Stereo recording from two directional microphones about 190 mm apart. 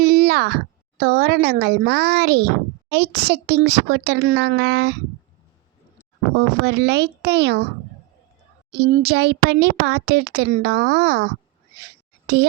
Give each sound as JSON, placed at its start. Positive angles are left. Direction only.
{"t": 0.0, "sound": "speech", "side_deg": -55}
{"t": 6.3, "sound": "speech", "side_deg": -60}
{"t": 8.7, "sound": "speech", "side_deg": -60}
{"t": 12.3, "sound": "a child's voice", "side_deg": -60}